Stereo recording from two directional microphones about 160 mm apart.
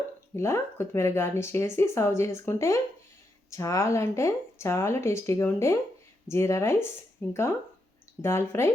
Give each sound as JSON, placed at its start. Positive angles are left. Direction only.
{"t": 0.3, "sound": "speech", "side_deg": 15}